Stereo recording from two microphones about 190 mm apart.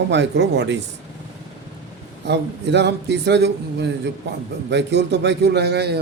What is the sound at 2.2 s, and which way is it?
Speech, 65° right (ahead or behind).